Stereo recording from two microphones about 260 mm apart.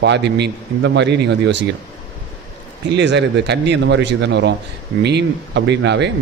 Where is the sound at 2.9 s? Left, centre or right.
Right.